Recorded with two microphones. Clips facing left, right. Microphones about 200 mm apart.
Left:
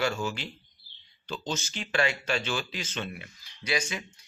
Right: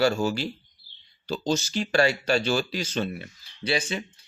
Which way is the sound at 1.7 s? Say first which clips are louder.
Right 5 dB; 40° right (ahead or behind).